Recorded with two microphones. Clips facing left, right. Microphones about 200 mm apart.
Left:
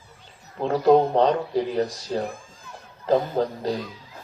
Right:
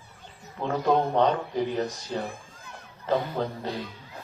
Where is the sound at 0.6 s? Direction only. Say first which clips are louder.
Left 6 dB; 35° left (ahead or behind).